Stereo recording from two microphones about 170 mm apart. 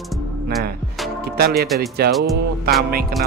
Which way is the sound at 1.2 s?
65° right (ahead or behind).